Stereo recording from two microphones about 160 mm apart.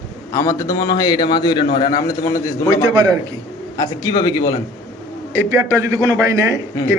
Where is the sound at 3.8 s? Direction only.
25° left (ahead or behind).